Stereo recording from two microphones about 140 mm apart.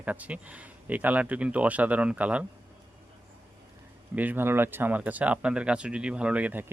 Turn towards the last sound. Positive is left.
turn(degrees=-10)  # may be behind; listen again after turning